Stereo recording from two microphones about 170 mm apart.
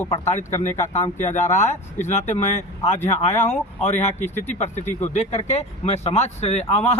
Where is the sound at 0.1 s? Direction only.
40° left (ahead or behind).